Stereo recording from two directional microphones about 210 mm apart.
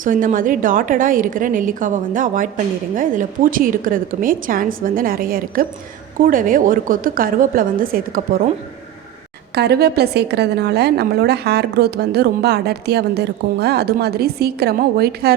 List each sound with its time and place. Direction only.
0.0 s a woman's voice: 40° right (ahead or behind)
9.6 s a woman's voice: 50° right (ahead or behind)